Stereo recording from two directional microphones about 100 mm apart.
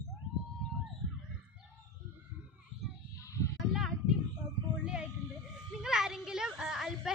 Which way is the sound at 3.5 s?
Centre (ahead or behind).